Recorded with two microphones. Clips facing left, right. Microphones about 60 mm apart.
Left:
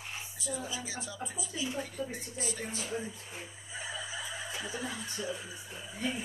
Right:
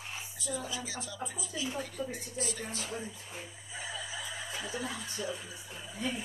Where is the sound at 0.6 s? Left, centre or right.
Centre.